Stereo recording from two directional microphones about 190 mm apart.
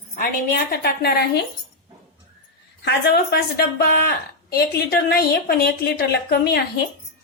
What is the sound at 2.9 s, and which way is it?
A woman's voice, 55° left (ahead or behind).